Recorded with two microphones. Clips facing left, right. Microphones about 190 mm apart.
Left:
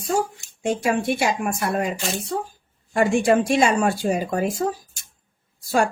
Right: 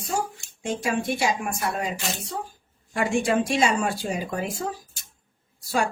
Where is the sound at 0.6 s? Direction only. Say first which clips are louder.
Left 4 dB; 55° left (ahead or behind).